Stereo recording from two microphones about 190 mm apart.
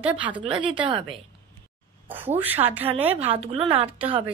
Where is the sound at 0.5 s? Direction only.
25° right (ahead or behind).